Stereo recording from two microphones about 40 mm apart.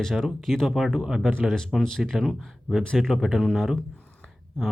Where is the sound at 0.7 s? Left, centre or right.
Centre.